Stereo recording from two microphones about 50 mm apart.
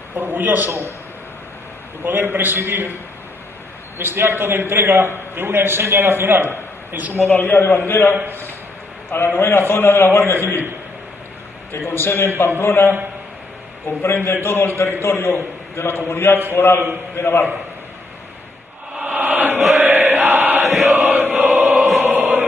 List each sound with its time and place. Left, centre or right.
0.1 s a man's voice: right
0.7 s a man's voice: right
2.0 s a man's voice: right
4.0 s a man's voice: right
6.9 s a man's voice: right
7.3 s a man's voice: left
9.1 s a man's voice: left
11.7 s a man's voice: left
13.8 s a man's voice: left
18.9 s chant: right
22.0 s music: right